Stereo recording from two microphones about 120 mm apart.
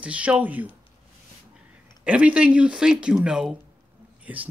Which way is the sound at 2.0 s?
10° right (ahead or behind).